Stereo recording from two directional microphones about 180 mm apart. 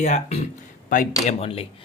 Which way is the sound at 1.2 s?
30° left (ahead or behind).